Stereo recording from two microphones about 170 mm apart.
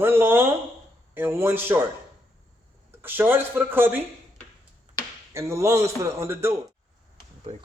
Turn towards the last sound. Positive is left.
turn(degrees=-15)  # may be behind; listen again after turning